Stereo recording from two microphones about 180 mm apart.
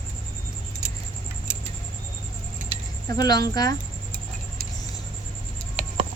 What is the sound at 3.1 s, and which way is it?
Speech, 20° left (ahead or behind).